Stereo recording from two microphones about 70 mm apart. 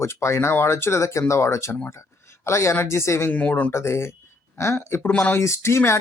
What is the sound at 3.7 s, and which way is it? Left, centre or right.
Speech, left.